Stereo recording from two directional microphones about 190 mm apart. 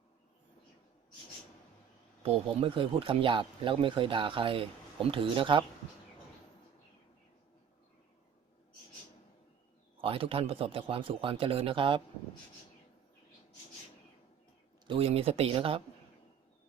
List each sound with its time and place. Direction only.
2.2 s speech: 30° right (ahead or behind)
10.0 s speech: 30° right (ahead or behind)
14.8 s speech: 30° right (ahead or behind)